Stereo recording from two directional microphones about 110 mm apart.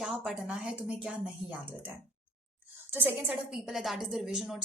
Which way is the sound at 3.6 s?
Centre (ahead or behind).